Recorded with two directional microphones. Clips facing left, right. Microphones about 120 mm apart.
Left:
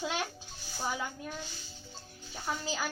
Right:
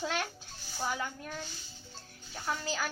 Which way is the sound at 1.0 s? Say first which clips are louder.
Even; 10° left (ahead or behind).